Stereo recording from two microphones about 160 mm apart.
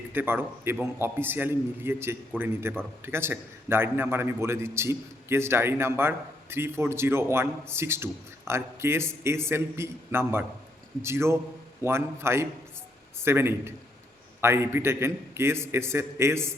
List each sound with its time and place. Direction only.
0.1 s a man's voice: 15° right (ahead or behind)